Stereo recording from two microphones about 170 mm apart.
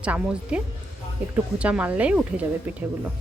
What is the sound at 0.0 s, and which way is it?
Speech, 5° right (ahead or behind).